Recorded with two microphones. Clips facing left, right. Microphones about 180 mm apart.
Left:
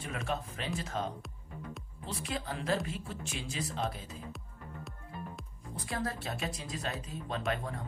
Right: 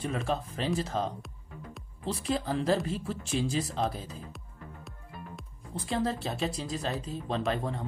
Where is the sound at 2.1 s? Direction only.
35° right (ahead or behind).